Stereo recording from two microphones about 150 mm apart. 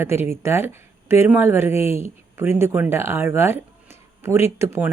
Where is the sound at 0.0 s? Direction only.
15° right (ahead or behind).